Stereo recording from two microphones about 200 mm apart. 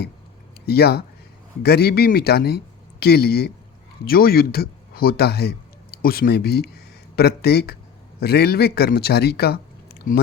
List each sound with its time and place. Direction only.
0.6 s a man's voice: 55° left (ahead or behind)